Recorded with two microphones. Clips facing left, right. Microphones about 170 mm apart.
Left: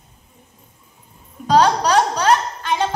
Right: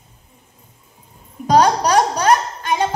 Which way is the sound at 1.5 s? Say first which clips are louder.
Right 1 dB; 15° right (ahead or behind).